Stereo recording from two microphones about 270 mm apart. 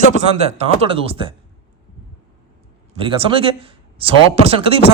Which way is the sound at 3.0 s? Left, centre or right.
Centre.